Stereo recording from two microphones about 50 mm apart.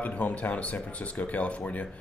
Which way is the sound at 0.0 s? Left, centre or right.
Left.